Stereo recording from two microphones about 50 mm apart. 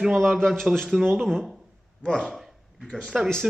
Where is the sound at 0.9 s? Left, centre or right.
Centre.